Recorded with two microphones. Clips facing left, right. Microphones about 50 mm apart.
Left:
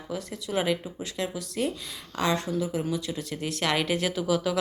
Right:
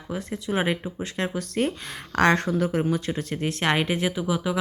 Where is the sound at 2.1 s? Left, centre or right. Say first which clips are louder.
Right 6 dB; right.